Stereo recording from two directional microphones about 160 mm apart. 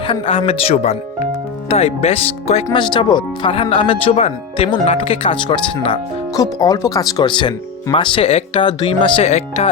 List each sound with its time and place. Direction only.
0.1 s speech: 35° left (ahead or behind)